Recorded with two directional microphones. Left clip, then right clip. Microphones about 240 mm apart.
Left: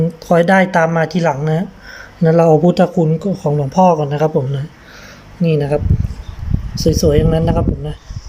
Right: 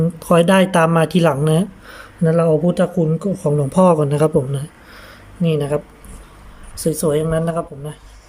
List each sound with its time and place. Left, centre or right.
0.2 s speech: centre
2.2 s speech: centre
5.4 s speech: centre
6.8 s speech: centre